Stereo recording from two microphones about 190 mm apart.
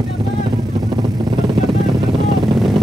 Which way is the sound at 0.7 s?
25° right (ahead or behind).